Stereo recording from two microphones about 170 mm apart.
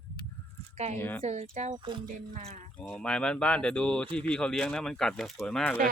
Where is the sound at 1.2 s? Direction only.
40° right (ahead or behind).